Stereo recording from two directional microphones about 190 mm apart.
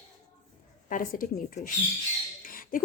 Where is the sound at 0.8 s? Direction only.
45° left (ahead or behind).